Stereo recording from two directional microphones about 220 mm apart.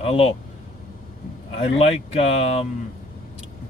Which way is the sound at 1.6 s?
25° left (ahead or behind).